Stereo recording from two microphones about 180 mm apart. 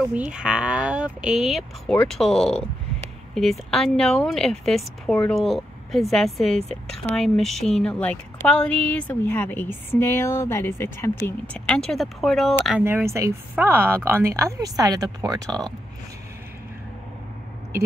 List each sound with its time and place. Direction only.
0.3 s speech: 5° right (ahead or behind)
12.8 s speech: 15° right (ahead or behind)